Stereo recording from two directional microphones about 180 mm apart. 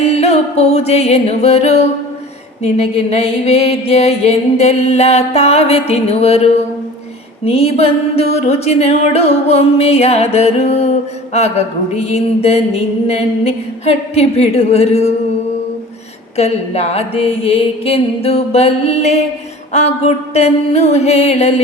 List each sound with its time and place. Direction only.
0.1 s music: 35° left (ahead or behind)
2.6 s mantra: 35° left (ahead or behind)
16.4 s mantra: 35° left (ahead or behind)